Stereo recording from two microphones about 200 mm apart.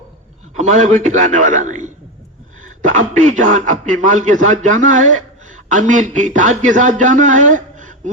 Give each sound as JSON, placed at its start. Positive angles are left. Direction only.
{"t": 0.5, "sound": "a man's voice", "side_deg": -35}